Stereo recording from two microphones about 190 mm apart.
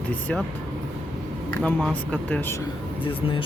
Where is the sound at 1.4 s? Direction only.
5° left (ahead or behind).